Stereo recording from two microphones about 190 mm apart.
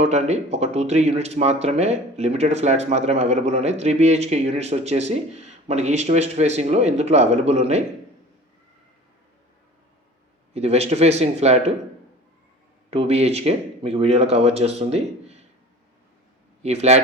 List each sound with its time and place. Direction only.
0.0 s speech: 35° right (ahead or behind)
10.5 s speech: 35° right (ahead or behind)
12.9 s speech: 35° right (ahead or behind)
16.6 s speech: 35° right (ahead or behind)